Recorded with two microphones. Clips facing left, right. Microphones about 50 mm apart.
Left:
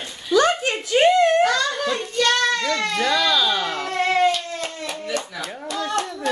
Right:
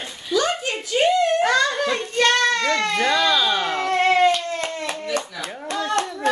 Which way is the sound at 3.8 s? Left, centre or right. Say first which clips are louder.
Right 3 dB; right.